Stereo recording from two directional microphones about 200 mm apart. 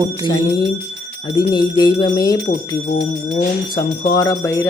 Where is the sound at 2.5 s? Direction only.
45° left (ahead or behind).